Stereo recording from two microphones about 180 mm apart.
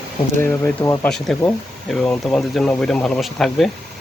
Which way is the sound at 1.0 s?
Centre (ahead or behind).